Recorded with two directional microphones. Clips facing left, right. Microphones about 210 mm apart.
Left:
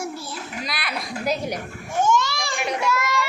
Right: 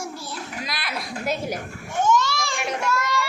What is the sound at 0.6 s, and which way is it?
Speech, centre (ahead or behind).